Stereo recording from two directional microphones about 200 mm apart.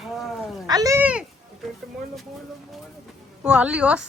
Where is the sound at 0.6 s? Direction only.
20° right (ahead or behind).